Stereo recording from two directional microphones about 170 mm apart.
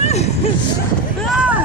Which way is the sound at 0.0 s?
40° left (ahead or behind).